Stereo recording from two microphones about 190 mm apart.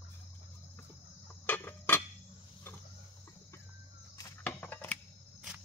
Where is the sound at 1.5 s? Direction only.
10° left (ahead or behind).